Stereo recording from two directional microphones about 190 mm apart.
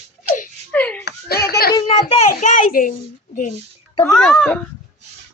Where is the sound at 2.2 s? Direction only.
40° left (ahead or behind).